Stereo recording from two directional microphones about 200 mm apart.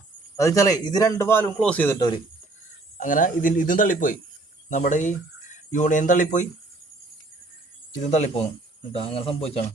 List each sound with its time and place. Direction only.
0.3 s a man's voice: 15° left (ahead or behind)
3.0 s speech: 40° left (ahead or behind)
8.0 s speech: 35° left (ahead or behind)